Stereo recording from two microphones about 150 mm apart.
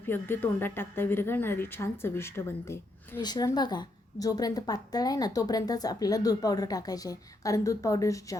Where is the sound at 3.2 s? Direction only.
25° left (ahead or behind).